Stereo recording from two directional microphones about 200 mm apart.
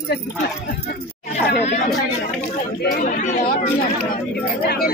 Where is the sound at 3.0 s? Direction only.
40° left (ahead or behind).